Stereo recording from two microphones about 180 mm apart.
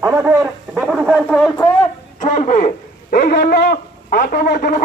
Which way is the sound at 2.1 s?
45° left (ahead or behind).